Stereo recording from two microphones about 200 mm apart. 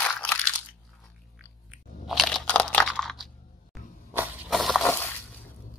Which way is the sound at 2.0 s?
Centre (ahead or behind).